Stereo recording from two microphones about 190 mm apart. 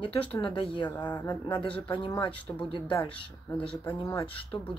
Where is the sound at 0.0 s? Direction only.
30° left (ahead or behind).